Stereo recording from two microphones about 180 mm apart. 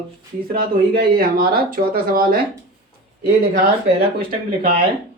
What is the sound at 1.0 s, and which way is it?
Speech, 55° right (ahead or behind).